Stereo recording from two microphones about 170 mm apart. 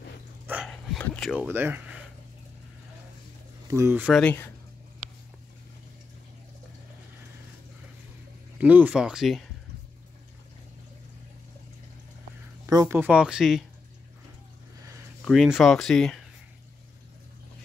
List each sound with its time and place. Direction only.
0.7 s a sound: 5° left (ahead or behind)
1.5 s speech: 10° right (ahead or behind)
3.6 s speech: 15° right (ahead or behind)
4.1 s speech: 10° left (ahead or behind)
8.5 s speech: 10° right (ahead or behind)
12.6 s speech: 20° right (ahead or behind); by 13.7 s centre (ahead or behind)
15.2 s speech: centre (ahead or behind)